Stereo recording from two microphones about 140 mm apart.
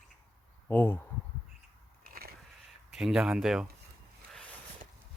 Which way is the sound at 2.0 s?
90° right.